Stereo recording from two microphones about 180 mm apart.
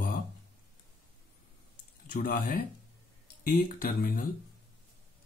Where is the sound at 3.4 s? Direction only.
50° left (ahead or behind).